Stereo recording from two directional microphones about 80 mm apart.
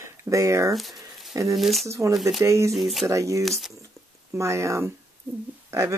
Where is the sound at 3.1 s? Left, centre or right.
Right.